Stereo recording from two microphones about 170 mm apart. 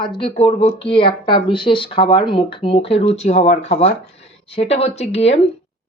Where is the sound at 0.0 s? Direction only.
30° left (ahead or behind).